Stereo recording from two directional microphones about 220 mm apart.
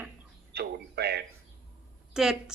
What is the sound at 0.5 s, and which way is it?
Music, 45° right (ahead or behind).